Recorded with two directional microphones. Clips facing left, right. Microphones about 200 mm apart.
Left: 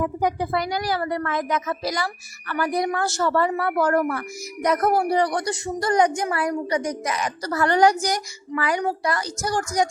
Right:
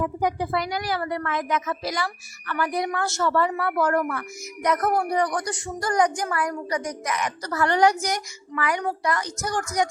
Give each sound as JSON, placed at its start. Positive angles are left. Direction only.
{"t": 0.2, "sound": "a woman's voice", "side_deg": 40}